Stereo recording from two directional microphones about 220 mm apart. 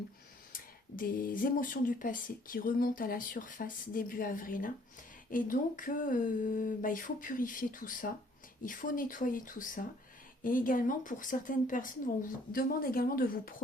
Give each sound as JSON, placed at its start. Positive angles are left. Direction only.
{"t": 0.5, "sound": "speech", "side_deg": 40}